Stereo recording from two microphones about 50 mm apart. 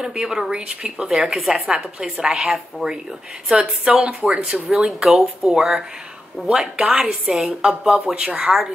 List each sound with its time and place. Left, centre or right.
0.0 s a woman's voice: centre
1.0 s a woman's voice: centre
2.2 s a woman's voice: centre
6.8 s speech: right
7.1 s a woman's voice: centre